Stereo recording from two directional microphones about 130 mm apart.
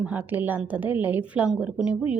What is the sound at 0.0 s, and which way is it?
Speech, 10° right (ahead or behind).